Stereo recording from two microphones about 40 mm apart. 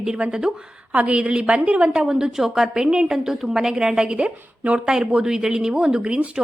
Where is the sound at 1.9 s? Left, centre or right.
Centre.